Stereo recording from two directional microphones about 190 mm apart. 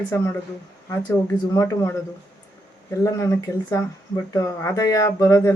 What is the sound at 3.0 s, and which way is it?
Speech, 15° left (ahead or behind).